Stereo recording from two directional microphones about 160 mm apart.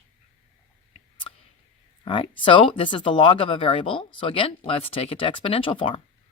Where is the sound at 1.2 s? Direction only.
40° left (ahead or behind).